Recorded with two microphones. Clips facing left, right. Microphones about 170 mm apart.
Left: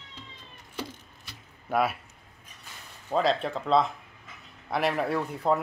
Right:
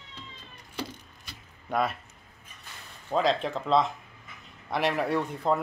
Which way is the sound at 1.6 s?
5° left (ahead or behind).